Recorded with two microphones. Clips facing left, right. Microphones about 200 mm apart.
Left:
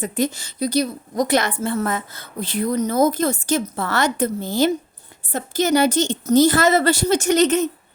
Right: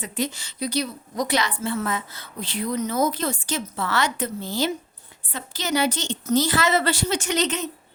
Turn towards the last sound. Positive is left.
turn(degrees=45)  # may be behind; listen again after turning